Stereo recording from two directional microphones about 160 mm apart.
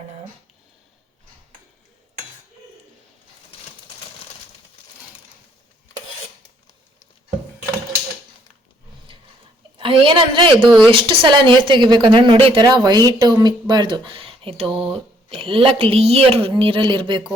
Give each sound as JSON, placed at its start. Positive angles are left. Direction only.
{"t": 9.7, "sound": "a woman's voice", "side_deg": -35}